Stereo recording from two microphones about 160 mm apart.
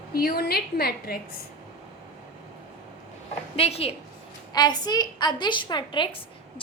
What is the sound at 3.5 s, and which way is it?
Speech, 40° left (ahead or behind).